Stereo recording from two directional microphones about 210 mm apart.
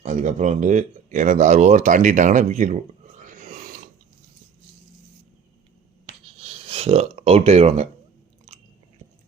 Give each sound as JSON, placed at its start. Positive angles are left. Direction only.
{"t": 0.0, "sound": "speech", "side_deg": -35}
{"t": 3.2, "sound": "a sound", "side_deg": -40}
{"t": 6.4, "sound": "speech", "side_deg": -30}